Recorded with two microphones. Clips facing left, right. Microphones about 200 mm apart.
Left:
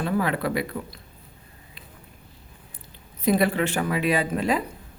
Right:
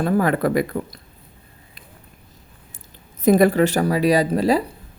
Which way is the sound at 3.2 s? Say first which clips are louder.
Right 7 dB; 45° right (ahead or behind).